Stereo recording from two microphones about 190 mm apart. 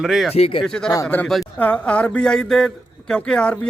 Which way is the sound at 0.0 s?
Centre (ahead or behind).